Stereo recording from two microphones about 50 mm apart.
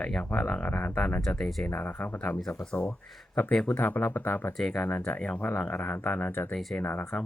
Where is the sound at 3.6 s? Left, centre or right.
Left.